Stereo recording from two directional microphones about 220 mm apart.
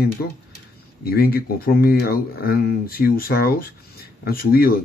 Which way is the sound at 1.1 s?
45° left (ahead or behind).